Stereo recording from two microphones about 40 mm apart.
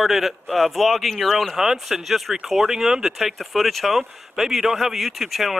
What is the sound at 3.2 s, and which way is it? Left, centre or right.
Speech, centre.